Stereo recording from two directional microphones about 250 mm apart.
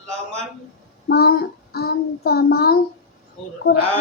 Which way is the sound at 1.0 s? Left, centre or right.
Left.